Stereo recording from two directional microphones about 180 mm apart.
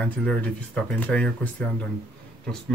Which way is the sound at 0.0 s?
5° left (ahead or behind).